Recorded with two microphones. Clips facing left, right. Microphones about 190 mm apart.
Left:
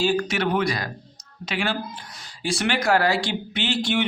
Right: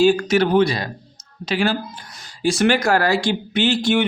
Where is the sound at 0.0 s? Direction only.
50° right (ahead or behind); by 0.9 s 25° right (ahead or behind).